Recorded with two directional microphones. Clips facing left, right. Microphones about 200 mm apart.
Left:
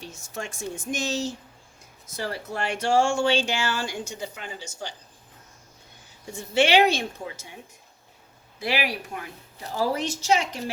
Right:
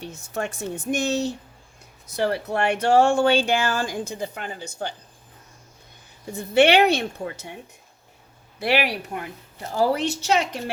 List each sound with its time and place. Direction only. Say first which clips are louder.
0.0 s speech: right 6 dB; 60° right (ahead or behind)
6.3 s speech: right 3 dB; 60° right (ahead or behind)
8.5 s speech: right 5 dB; 65° right (ahead or behind)